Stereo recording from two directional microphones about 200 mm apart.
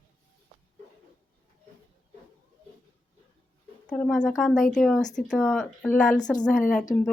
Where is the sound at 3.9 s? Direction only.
5° left (ahead or behind).